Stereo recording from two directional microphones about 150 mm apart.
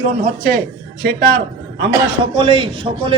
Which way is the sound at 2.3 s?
35° right (ahead or behind).